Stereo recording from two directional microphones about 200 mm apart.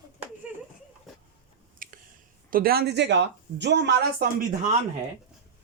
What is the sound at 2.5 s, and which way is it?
Speech, 50° right (ahead or behind).